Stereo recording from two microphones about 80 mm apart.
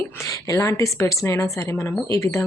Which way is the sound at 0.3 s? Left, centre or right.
Left.